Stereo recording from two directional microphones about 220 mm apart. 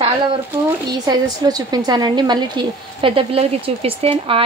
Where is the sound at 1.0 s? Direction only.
15° right (ahead or behind).